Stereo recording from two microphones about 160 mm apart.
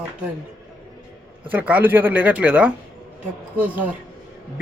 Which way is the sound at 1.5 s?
10° right (ahead or behind).